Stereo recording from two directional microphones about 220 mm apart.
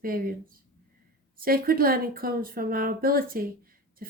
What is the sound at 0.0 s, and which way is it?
Speech, 40° right (ahead or behind).